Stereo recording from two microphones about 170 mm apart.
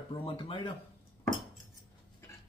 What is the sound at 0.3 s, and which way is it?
Speech, 30° left (ahead or behind).